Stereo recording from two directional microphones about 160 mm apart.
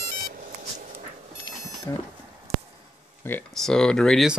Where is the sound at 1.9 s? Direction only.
20° left (ahead or behind).